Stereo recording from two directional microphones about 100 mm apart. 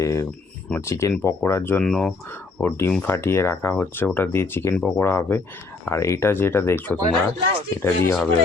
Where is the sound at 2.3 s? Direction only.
20° left (ahead or behind).